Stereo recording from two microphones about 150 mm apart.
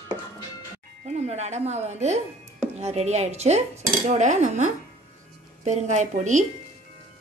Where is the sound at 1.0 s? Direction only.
50° right (ahead or behind).